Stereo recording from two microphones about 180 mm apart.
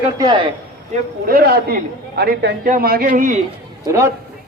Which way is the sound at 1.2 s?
60° right (ahead or behind).